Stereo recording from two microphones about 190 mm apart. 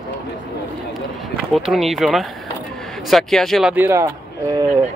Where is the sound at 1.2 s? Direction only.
Centre (ahead or behind); by 4.8 s 20° right (ahead or behind).